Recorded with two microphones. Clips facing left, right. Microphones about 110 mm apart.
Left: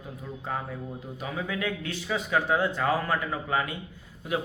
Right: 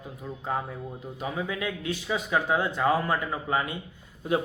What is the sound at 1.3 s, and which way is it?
A man's voice, 15° right (ahead or behind).